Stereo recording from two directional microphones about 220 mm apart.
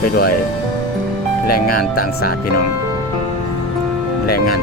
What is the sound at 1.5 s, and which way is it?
Speech, 40° left (ahead or behind).